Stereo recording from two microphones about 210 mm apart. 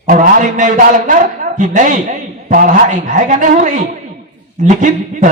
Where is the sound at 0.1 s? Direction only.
40° right (ahead or behind).